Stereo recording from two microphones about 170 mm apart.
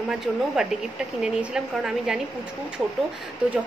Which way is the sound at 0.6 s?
5° right (ahead or behind).